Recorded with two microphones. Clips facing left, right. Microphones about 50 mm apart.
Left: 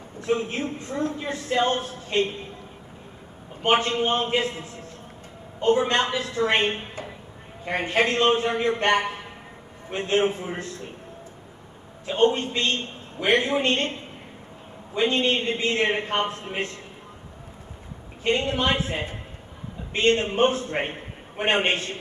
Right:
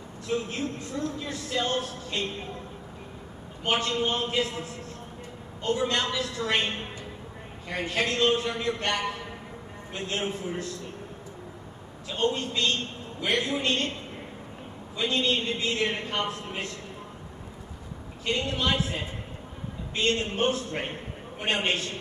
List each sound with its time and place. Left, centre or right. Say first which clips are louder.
0.2 s a man's voice: left 4 dB; left
3.6 s a man's voice: left 5 dB; left
12.1 s a man's voice: left 7 dB; left
15.0 s a man's voice: left 4 dB; left
18.2 s a man's voice: left 5 dB; left